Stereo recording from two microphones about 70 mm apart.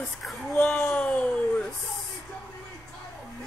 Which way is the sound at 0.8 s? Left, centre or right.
Left.